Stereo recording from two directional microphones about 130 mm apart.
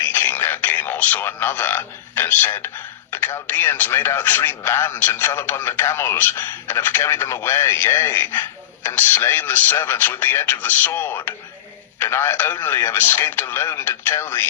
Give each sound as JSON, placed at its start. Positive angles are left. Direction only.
{"t": 0.0, "sound": "speech", "side_deg": 15}